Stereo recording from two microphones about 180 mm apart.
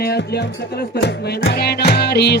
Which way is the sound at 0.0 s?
65° left (ahead or behind).